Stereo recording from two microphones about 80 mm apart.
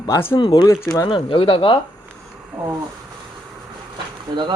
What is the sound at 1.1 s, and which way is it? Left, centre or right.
Speech, left.